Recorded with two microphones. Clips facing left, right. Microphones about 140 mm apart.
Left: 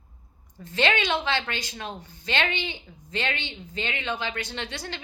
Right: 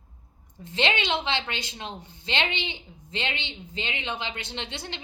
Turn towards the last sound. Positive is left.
turn(degrees=-20)  # may be behind; listen again after turning